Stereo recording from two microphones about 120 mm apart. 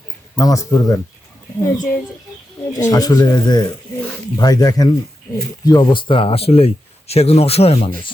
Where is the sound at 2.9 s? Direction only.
30° left (ahead or behind).